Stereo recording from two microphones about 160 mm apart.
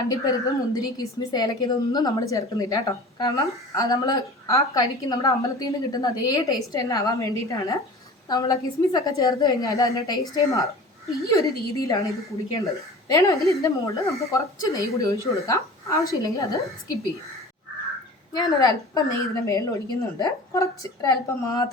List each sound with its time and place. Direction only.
0.1 s a woman's voice: 20° left (ahead or behind)
19.3 s a woman's voice: 20° left (ahead or behind)